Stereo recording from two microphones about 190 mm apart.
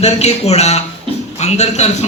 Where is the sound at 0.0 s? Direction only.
35° left (ahead or behind).